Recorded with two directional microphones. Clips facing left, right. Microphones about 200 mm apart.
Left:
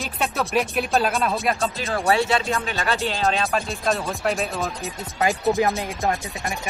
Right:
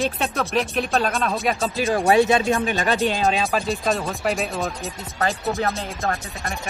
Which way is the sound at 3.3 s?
Centre (ahead or behind).